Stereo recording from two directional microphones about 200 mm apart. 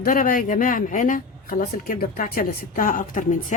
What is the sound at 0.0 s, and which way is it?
Speech, 45° left (ahead or behind).